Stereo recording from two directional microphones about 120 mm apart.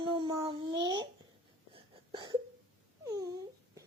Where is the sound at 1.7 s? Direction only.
40° right (ahead or behind).